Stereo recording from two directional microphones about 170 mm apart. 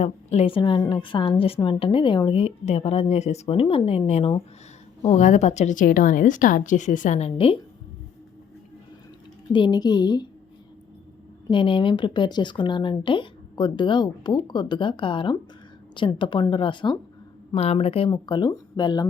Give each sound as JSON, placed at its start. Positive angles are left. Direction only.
{"t": 0.0, "sound": "a woman's voice", "side_deg": 40}
{"t": 9.5, "sound": "speech", "side_deg": 25}
{"t": 11.5, "sound": "speech", "side_deg": 30}